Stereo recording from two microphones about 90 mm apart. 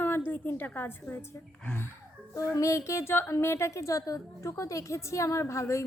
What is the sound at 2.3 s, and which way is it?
A woman's voice, 35° left (ahead or behind).